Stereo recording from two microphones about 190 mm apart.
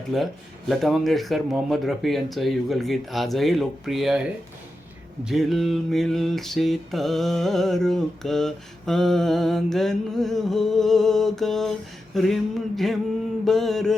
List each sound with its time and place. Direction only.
0.1 s mantra: centre (ahead or behind)
5.2 s mantra: centre (ahead or behind)